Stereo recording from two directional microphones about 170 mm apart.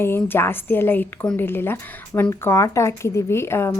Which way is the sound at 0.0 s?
15° left (ahead or behind).